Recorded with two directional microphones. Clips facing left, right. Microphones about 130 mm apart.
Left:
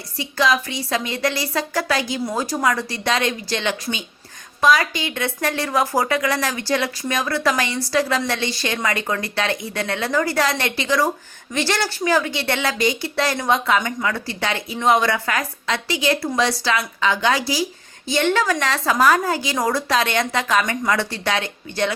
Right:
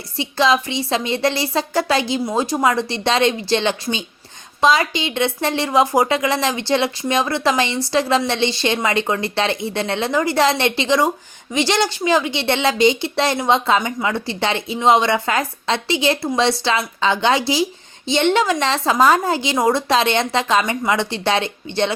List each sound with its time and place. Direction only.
0.2 s a woman's voice: 25° right (ahead or behind)